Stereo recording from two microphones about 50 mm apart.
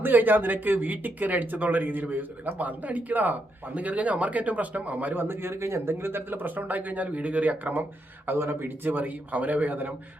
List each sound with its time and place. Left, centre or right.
0.0 s speech: right
5.1 s speech: right